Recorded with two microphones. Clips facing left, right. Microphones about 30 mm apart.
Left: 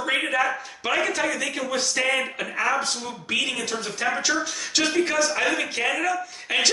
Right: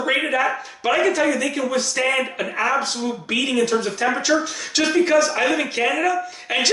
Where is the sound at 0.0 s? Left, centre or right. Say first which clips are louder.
Right 3 dB; centre.